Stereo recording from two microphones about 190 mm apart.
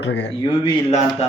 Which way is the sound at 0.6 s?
35° left (ahead or behind).